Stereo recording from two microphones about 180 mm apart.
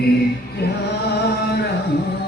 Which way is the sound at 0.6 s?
65° left (ahead or behind).